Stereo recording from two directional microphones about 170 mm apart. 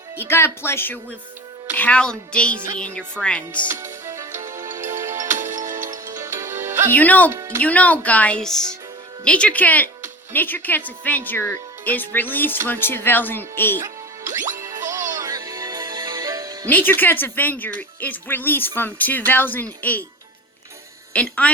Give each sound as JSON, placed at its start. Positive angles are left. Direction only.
{"t": 0.2, "sound": "speech", "side_deg": 15}
{"t": 3.7, "sound": "music", "side_deg": -15}
{"t": 5.4, "sound": "music", "side_deg": -50}
{"t": 6.2, "sound": "music", "side_deg": -15}
{"t": 6.9, "sound": "speech", "side_deg": 10}
{"t": 7.3, "sound": "speech", "side_deg": -20}
{"t": 7.6, "sound": "speech", "side_deg": 10}
{"t": 14.8, "sound": "music", "side_deg": -50}
{"t": 15.2, "sound": "music", "side_deg": -20}
{"t": 16.6, "sound": "speech", "side_deg": 10}
{"t": 21.1, "sound": "a woman's voice", "side_deg": 10}